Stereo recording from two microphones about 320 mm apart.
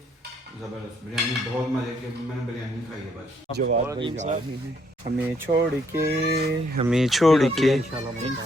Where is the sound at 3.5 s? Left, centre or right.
Right.